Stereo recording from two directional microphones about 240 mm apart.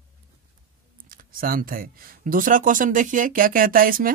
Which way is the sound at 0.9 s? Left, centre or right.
Right.